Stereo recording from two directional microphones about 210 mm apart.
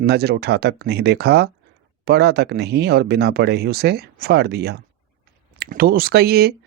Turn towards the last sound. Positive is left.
turn(degrees=-50)  # may be behind; listen again after turning